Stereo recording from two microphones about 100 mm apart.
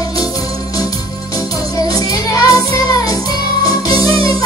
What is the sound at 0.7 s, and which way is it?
Music, 35° left (ahead or behind).